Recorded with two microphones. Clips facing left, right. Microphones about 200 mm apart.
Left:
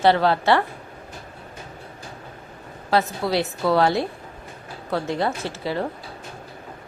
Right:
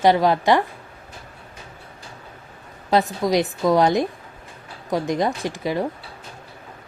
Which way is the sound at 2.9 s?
15° right (ahead or behind).